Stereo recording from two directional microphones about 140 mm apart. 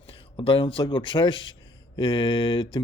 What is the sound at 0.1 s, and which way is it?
Speech, 35° left (ahead or behind).